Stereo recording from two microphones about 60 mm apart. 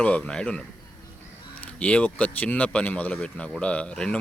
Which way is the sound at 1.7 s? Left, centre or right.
Centre.